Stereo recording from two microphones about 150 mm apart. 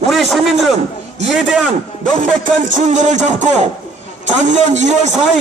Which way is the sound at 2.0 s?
55° right (ahead or behind).